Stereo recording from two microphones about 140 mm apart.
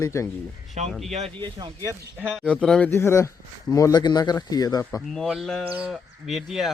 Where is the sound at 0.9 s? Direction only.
Centre (ahead or behind).